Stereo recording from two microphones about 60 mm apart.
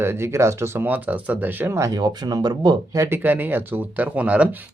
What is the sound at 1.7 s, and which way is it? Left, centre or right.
Speech, right.